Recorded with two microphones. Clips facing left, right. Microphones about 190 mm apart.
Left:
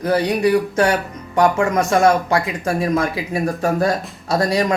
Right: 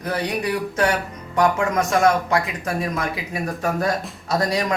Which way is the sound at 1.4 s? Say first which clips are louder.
Left 3 dB; 30° left (ahead or behind).